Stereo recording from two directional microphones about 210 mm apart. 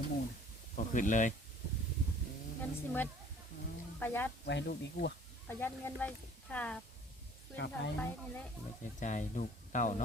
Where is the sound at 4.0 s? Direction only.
10° left (ahead or behind).